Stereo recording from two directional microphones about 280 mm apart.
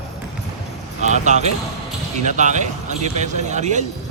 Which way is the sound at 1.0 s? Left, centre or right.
Right.